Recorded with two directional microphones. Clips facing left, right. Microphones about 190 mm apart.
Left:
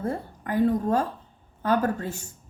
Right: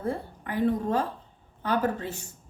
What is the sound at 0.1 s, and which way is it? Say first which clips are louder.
A woman's voice: left 3 dB; 45° left (ahead or behind).